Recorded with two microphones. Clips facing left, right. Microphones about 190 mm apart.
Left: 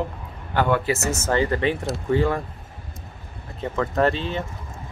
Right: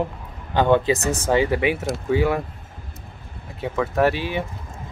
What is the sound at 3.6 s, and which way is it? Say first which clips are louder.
Speech: right 1 dB; 10° right (ahead or behind).